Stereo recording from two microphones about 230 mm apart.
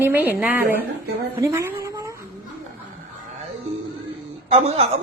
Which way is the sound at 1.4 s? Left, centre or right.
Centre.